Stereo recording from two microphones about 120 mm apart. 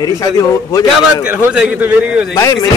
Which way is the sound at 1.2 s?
10° right (ahead or behind).